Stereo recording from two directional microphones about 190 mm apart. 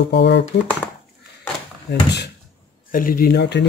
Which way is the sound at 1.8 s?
60° left (ahead or behind).